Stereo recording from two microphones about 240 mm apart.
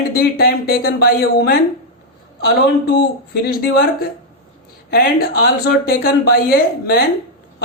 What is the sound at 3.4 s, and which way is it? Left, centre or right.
Speech, left.